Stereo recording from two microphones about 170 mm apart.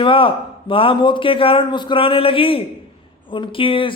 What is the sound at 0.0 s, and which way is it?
A man's voice, 30° left (ahead or behind).